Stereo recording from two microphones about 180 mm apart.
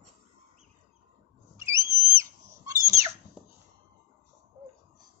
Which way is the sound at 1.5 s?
15° right (ahead or behind).